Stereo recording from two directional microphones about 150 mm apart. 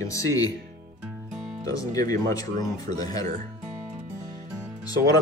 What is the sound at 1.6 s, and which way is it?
Speech, 25° left (ahead or behind).